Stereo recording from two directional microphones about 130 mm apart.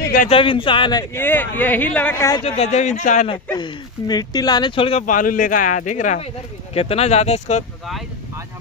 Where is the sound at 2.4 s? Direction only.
55° left (ahead or behind); by 3.3 s 75° left (ahead or behind).